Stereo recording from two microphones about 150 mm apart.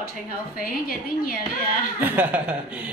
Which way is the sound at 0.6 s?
80° left.